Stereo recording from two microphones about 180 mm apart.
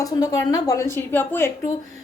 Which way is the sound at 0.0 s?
20° left (ahead or behind).